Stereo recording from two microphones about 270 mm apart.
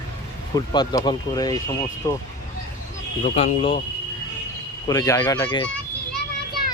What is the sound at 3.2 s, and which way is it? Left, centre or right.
Speech, left.